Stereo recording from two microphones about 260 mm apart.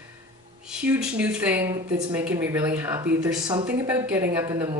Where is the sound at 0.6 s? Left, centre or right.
Centre.